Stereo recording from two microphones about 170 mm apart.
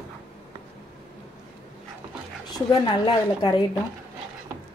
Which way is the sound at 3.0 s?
25° left (ahead or behind).